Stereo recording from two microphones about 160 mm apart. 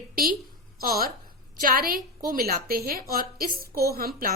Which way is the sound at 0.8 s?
70° right (ahead or behind).